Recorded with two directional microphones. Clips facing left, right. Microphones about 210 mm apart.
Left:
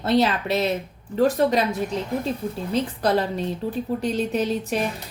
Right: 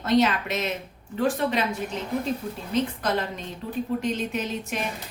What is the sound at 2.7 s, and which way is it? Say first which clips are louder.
A woman's voice: left 3 dB; 35° left (ahead or behind).